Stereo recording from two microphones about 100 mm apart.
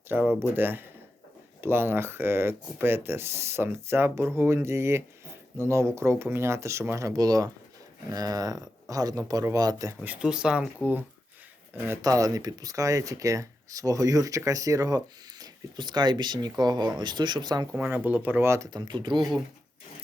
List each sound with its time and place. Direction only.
0.1 s speech: 20° right (ahead or behind); by 9.9 s 35° right (ahead or behind)
10.0 s speech: 15° right (ahead or behind)
12.0 s speech: 35° right (ahead or behind)
17.7 s speech: 20° right (ahead or behind)
18.7 s speech: 50° right (ahead or behind)